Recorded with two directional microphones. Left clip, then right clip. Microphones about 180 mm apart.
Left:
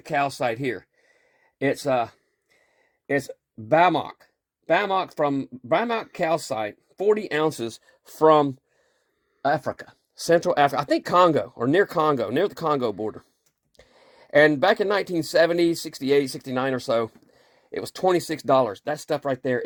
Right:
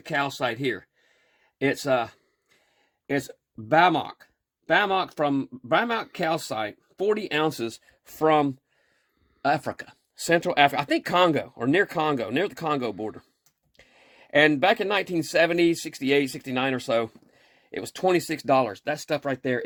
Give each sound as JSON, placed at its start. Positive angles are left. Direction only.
{"t": 0.0, "sound": "speech", "side_deg": 30}
{"t": 1.5, "sound": "speech", "side_deg": 20}
{"t": 9.5, "sound": "speech", "side_deg": 20}
{"t": 13.7, "sound": "a sound", "side_deg": 35}
{"t": 14.4, "sound": "speech", "side_deg": 30}